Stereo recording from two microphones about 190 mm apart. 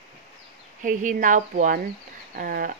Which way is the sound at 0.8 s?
45° right (ahead or behind).